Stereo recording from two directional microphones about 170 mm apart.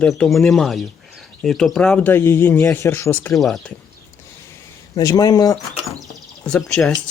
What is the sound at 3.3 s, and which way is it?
Speech, centre (ahead or behind).